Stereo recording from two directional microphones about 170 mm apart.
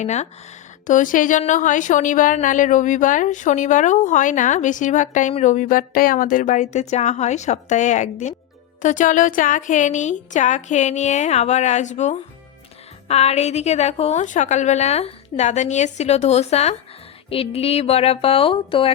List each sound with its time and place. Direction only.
0.0 s a woman's voice: 40° left (ahead or behind)